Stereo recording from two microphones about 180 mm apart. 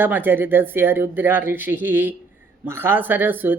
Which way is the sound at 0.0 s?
10° right (ahead or behind).